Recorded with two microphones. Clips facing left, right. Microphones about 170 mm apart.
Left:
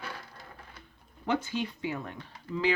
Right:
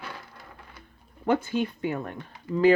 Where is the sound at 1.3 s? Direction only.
55° right (ahead or behind).